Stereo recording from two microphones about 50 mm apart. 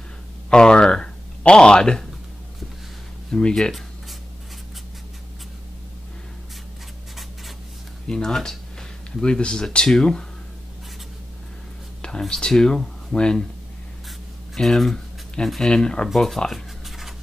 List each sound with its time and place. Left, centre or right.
0.5 s speech: centre
3.3 s speech: centre
8.1 s speech: centre
12.2 s speech: centre
14.5 s speech: centre
16.1 s speech: centre
16.5 s writing: centre